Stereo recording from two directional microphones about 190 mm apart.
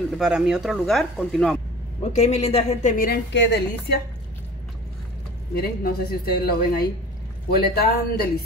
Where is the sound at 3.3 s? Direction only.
65° left (ahead or behind).